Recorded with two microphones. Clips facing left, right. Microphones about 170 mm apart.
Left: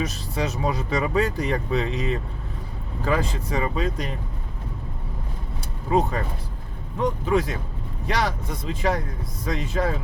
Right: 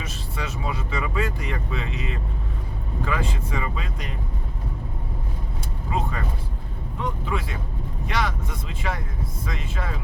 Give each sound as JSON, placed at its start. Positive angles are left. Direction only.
{"t": 0.0, "sound": "speech", "side_deg": 40}
{"t": 7.0, "sound": "speech", "side_deg": 40}